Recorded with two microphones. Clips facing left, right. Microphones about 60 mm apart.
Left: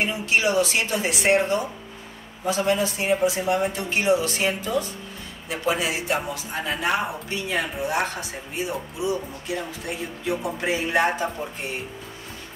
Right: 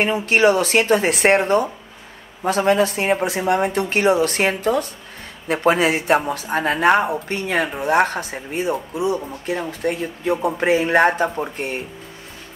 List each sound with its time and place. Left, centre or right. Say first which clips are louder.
0.0 s speech: right 7 dB; right